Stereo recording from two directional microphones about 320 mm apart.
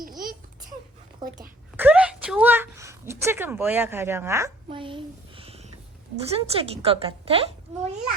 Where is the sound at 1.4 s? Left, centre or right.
Centre.